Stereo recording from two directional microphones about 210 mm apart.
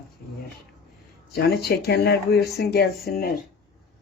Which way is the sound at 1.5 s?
50° left (ahead or behind).